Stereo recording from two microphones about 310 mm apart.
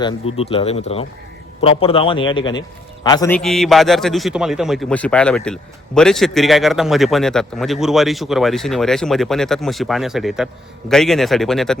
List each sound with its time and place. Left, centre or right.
0.0 s a man's voice: centre